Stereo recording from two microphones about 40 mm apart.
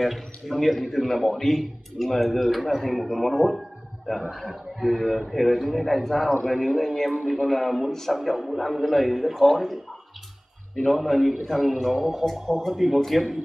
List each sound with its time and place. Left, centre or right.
0.0 s a man's voice: centre
10.8 s a man's voice: centre